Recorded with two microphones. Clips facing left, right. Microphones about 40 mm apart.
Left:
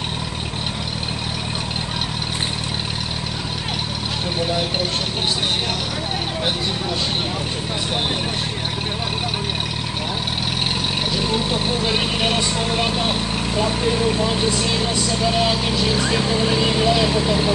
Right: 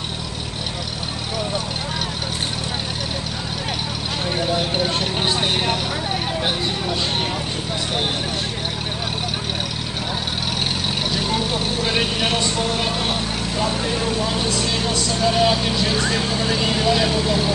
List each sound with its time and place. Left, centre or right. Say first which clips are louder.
11.1 s speech: left 1 dB; centre
15.1 s speech: right 3 dB; centre